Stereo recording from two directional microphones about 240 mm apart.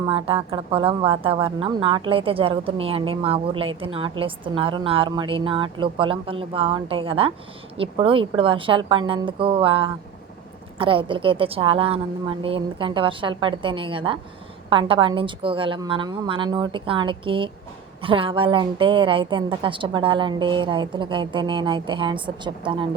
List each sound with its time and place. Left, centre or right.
0.0 s a woman's voice: right